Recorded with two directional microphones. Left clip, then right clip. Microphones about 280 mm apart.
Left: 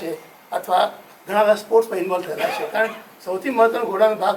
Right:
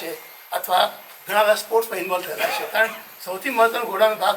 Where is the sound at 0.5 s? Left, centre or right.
Centre.